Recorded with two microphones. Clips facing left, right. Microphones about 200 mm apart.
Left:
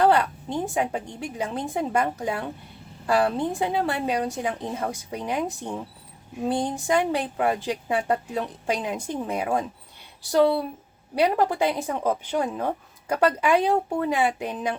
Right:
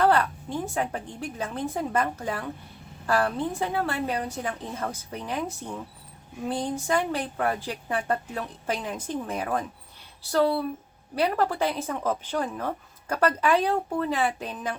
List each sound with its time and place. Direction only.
0.0 s a woman's voice: 15° left (ahead or behind)